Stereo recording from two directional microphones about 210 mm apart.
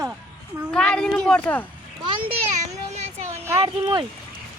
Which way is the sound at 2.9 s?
30° right (ahead or behind).